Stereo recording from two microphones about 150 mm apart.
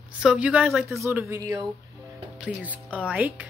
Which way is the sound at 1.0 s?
15° right (ahead or behind).